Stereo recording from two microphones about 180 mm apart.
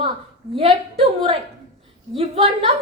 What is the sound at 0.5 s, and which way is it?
A woman's voice, 30° right (ahead or behind).